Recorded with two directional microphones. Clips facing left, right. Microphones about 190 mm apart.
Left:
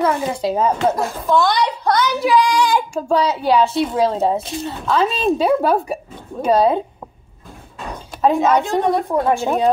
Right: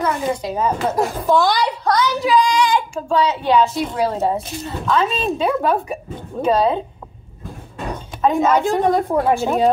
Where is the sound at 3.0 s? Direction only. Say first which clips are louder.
Left 1 dB; 35° left (ahead or behind).